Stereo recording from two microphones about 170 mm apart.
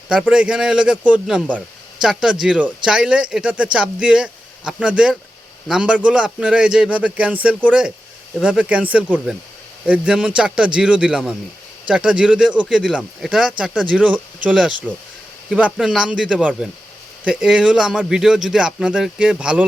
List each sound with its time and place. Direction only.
0.1 s speech: 5° right (ahead or behind)